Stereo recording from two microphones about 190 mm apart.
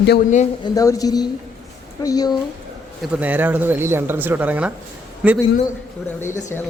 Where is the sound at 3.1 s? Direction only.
10° right (ahead or behind).